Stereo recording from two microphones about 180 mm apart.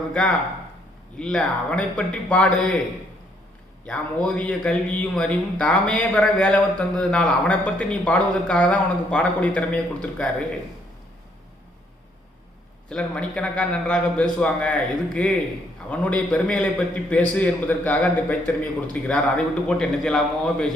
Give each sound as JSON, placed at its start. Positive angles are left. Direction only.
{"t": 0.1, "sound": "speech", "side_deg": 5}
{"t": 3.8, "sound": "speech", "side_deg": 5}
{"t": 12.9, "sound": "a man's voice", "side_deg": 5}